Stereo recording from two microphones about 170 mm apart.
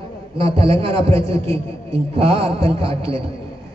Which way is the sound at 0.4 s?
35° right (ahead or behind).